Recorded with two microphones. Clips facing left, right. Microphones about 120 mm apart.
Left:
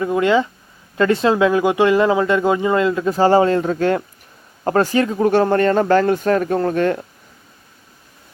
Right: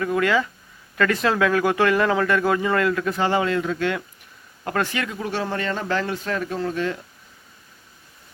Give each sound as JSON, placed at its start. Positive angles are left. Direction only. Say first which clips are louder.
{"t": 0.0, "sound": "speech", "louder": "left 5 dB", "side_deg": 25}
{"t": 3.2, "sound": "speech", "louder": "left 11 dB", "side_deg": 35}
{"t": 5.3, "sound": "speech", "louder": "left 11 dB", "side_deg": 50}